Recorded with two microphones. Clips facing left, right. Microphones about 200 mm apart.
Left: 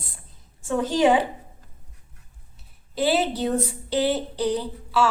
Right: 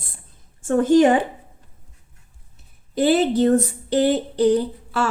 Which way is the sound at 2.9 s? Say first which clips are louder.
Right 6 dB; 50° right (ahead or behind).